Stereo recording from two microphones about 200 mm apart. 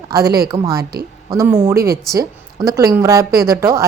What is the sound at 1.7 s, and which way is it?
Speech, 50° right (ahead or behind).